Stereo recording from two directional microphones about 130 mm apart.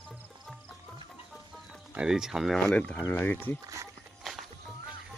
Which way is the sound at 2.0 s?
5° right (ahead or behind).